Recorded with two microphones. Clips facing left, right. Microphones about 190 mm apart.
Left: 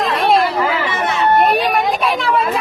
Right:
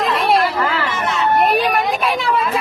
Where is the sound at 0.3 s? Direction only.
Centre (ahead or behind).